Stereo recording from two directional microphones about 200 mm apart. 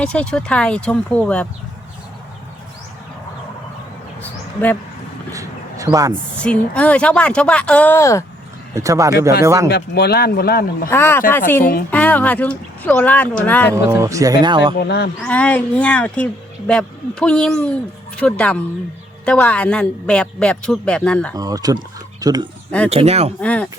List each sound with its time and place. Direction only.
0.0 s speech: 5° left (ahead or behind)
4.2 s bird: 10° left (ahead or behind)
5.3 s a sound: 15° right (ahead or behind)
6.4 s speech: 5° left (ahead or behind)
8.7 s speech: 15° right (ahead or behind)
9.6 s speech: 50° left (ahead or behind)
10.8 s speech: 10° left (ahead or behind)
13.7 s speech: 15° right (ahead or behind)
14.8 s speech: 55° left (ahead or behind)
15.2 s speech: 5° left (ahead or behind)
21.3 s speech: 20° right (ahead or behind)
22.9 s speech: 30° right (ahead or behind)
23.4 s speech: 5° left (ahead or behind)